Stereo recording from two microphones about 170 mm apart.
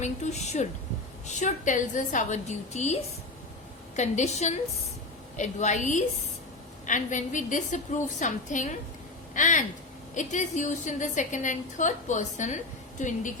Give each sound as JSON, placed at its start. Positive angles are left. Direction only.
{"t": 0.0, "sound": "a woman's voice", "side_deg": 40}